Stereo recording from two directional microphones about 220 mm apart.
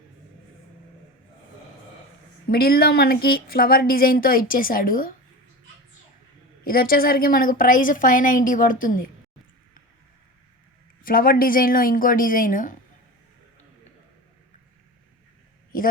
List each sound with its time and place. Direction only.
2.5 s speech: 45° left (ahead or behind)
6.7 s speech: 40° left (ahead or behind)
11.0 s speech: 40° left (ahead or behind)